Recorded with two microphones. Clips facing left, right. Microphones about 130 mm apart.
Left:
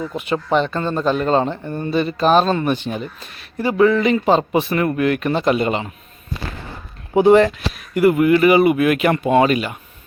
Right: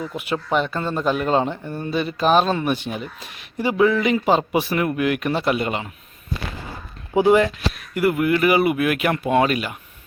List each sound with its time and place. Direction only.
0.1 s speech: 5° right (ahead or behind)
7.1 s a man's voice: 20° left (ahead or behind)
7.7 s speech: centre (ahead or behind)